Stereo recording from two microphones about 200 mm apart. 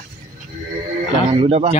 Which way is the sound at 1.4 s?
30° right (ahead or behind).